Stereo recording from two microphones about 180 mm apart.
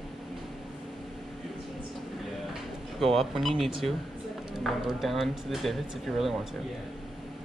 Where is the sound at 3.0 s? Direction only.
Centre (ahead or behind).